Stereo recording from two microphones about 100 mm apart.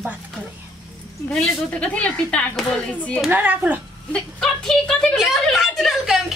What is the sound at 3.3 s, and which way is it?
Speech, 15° right (ahead or behind).